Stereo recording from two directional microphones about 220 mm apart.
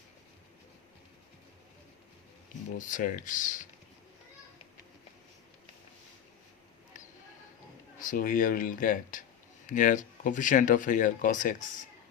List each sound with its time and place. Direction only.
2.7 s speech: 35° left (ahead or behind)
7.9 s speech: 40° left (ahead or behind)